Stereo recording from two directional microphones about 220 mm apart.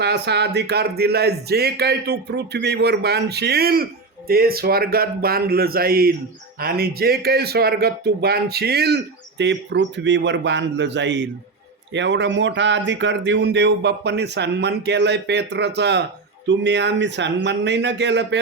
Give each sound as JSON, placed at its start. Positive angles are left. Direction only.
{"t": 0.0, "sound": "speech", "side_deg": -50}